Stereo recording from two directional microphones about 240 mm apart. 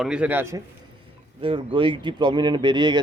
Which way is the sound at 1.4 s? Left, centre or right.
Right.